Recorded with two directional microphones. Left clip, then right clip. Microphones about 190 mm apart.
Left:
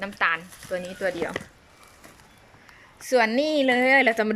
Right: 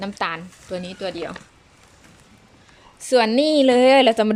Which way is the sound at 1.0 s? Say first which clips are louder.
Left 2 dB; 10° right (ahead or behind).